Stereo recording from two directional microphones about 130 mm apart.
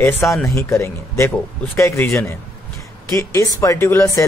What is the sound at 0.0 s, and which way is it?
Speech, 20° left (ahead or behind).